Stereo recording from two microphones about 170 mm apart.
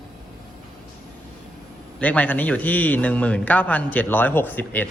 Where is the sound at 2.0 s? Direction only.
10° left (ahead or behind).